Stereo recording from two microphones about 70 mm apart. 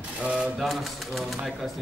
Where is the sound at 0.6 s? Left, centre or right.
Centre.